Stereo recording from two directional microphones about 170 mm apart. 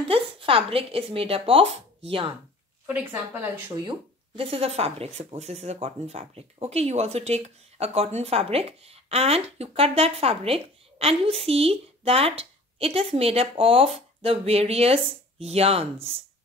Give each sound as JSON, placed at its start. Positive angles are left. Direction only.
{"t": 0.1, "sound": "speech", "side_deg": -30}
{"t": 2.9, "sound": "a woman's voice", "side_deg": -10}
{"t": 4.4, "sound": "speech", "side_deg": -35}